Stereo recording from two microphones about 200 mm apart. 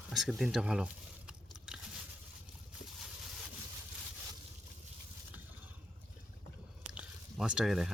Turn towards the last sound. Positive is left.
turn(degrees=0)  # may be behind; listen again after turning